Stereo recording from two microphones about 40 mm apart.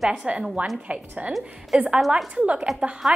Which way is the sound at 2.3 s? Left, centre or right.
Right.